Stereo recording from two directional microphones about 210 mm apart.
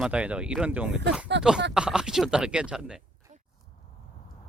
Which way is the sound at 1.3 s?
55° right (ahead or behind).